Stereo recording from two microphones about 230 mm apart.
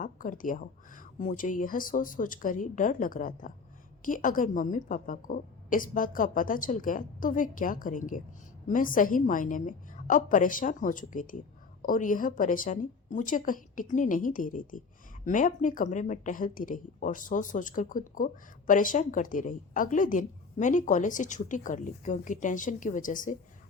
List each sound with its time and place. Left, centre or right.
0.0 s a woman's voice: left